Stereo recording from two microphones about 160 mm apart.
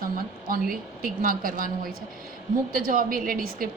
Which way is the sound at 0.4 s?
65° right (ahead or behind).